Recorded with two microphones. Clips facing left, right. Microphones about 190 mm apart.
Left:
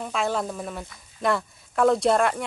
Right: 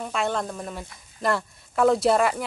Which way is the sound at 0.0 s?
Centre (ahead or behind).